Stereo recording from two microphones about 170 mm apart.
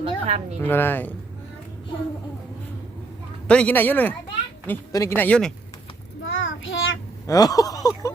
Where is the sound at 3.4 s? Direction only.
5° left (ahead or behind).